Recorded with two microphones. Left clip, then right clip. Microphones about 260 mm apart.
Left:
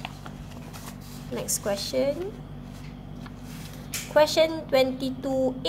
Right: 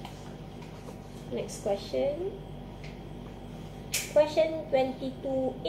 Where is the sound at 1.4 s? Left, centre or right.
Left.